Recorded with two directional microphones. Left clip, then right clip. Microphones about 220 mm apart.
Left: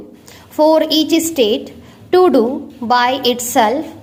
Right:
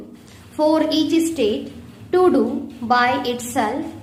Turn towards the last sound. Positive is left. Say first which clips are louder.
# left 8 dB
turn(degrees=35)  # may be behind; listen again after turning